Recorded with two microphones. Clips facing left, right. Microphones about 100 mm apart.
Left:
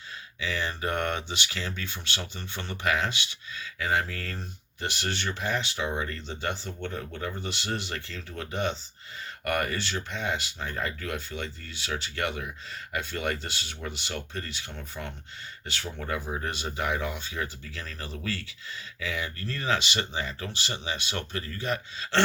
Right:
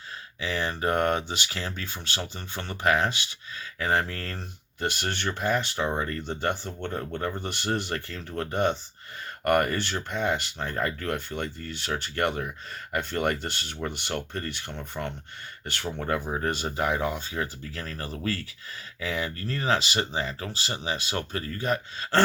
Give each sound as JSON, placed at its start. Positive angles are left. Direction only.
{"t": 0.3, "sound": "speech", "side_deg": -35}